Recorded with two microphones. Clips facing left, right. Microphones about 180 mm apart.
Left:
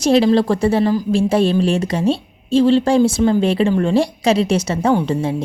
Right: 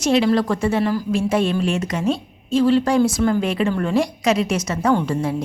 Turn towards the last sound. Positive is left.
turn(degrees=25)  # may be behind; listen again after turning